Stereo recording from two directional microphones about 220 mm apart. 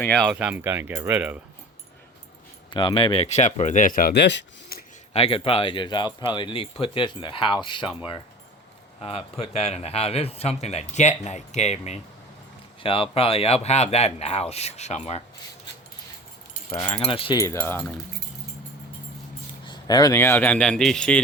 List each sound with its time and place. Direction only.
0.0 s speech: 5° left (ahead or behind)
0.3 s speech: 5° right (ahead or behind)
2.7 s speech: 25° left (ahead or behind); by 4.8 s 50° left (ahead or behind)
5.1 s speech: 25° left (ahead or behind)
16.7 s speech: 15° left (ahead or behind)
17.0 s speech: 25° left (ahead or behind); by 18.0 s 10° left (ahead or behind)
19.6 s speech: 20° left (ahead or behind); by 21.2 s 5° left (ahead or behind)